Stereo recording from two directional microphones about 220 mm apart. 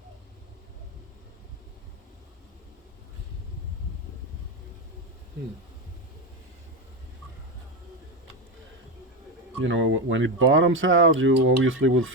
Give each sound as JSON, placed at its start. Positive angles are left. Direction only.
{"t": 9.6, "sound": "speech", "side_deg": -55}